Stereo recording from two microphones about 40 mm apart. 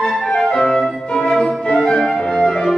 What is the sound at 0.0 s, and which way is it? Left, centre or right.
Music, centre.